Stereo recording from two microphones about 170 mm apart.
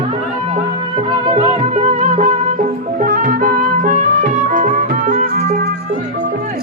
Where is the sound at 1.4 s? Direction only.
40° right (ahead or behind).